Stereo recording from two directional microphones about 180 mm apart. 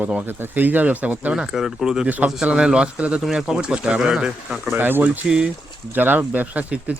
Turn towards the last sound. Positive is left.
turn(degrees=-10)  # may be behind; listen again after turning